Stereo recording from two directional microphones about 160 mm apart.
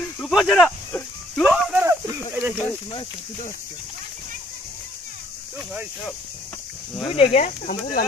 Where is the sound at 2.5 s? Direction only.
10° left (ahead or behind).